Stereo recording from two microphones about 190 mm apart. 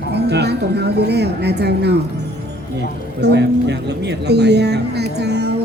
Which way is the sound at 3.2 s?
60° right (ahead or behind).